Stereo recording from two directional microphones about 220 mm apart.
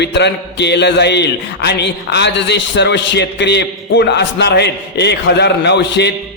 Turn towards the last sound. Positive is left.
turn(degrees=50)  # may be behind; listen again after turning